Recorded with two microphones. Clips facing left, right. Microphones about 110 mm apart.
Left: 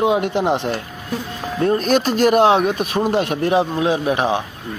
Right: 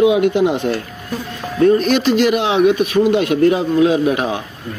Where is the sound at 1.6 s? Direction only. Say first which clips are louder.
Right 4 dB; 40° left (ahead or behind).